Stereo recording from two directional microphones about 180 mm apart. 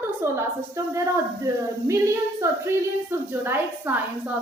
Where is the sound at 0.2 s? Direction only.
15° right (ahead or behind).